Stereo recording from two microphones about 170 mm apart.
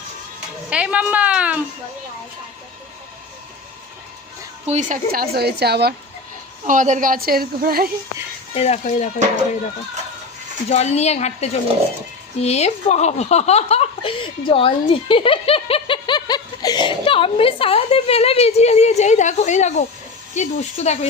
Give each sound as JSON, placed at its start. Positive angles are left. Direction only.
{"t": 0.7, "sound": "a woman's voice", "side_deg": -5}
{"t": 4.6, "sound": "a woman's voice", "side_deg": -45}
{"t": 6.7, "sound": "a woman's voice", "side_deg": -50}
{"t": 8.5, "sound": "speech", "side_deg": 40}
{"t": 10.7, "sound": "speech", "side_deg": 40}